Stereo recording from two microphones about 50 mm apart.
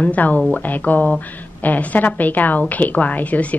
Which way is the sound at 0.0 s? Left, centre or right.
Left.